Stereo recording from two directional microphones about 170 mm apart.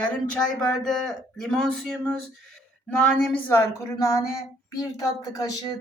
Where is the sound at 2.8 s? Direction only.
5° left (ahead or behind).